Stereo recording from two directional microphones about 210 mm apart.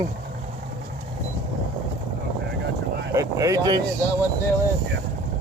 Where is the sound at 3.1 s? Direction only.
15° right (ahead or behind).